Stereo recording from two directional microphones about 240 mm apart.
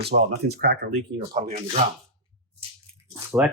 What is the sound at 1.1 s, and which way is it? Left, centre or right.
Speech, right.